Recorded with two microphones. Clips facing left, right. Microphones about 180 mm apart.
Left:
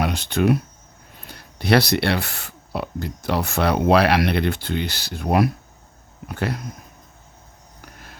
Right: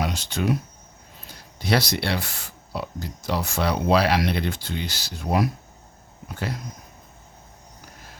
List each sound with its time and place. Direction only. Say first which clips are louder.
0.0 s speech: left 5 dB; 60° left (ahead or behind)